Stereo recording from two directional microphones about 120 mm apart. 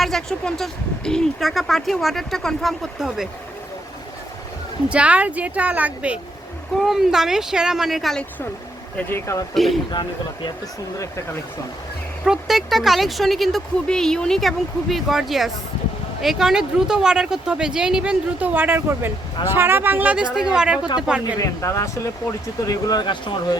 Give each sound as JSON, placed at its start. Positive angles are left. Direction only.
{"t": 0.0, "sound": "speech", "side_deg": 5}
{"t": 4.9, "sound": "speech", "side_deg": -10}
{"t": 9.0, "sound": "speech", "side_deg": 20}
{"t": 9.9, "sound": "speech", "side_deg": 40}
{"t": 12.2, "sound": "speech", "side_deg": -5}
{"t": 21.3, "sound": "speech", "side_deg": 30}